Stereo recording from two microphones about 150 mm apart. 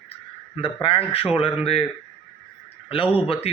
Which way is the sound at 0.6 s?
40° left (ahead or behind).